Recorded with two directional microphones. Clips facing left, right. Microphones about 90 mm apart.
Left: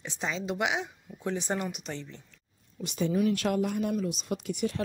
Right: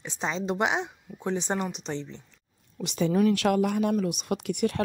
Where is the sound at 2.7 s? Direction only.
90° right.